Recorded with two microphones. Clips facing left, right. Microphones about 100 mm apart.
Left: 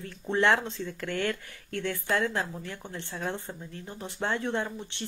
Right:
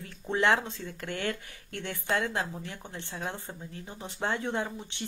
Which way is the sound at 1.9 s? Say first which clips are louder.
Even; 20° right (ahead or behind).